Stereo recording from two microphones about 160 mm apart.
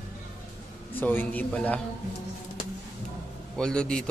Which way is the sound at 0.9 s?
10° left (ahead or behind).